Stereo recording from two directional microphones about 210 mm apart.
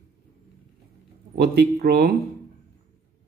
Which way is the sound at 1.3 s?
50° right (ahead or behind).